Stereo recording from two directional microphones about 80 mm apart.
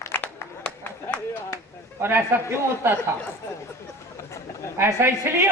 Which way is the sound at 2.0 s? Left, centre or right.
Right.